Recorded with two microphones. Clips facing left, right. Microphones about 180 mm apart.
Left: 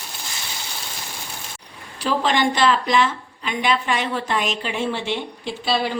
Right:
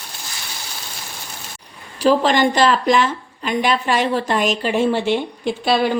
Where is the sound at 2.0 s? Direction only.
40° right (ahead or behind).